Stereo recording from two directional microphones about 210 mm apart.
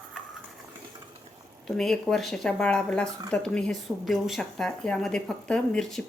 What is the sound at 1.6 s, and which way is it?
A woman's voice, centre (ahead or behind).